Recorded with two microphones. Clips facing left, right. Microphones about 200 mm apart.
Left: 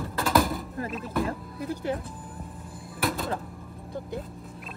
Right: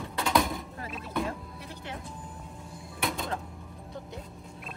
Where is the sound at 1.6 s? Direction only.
45° left (ahead or behind).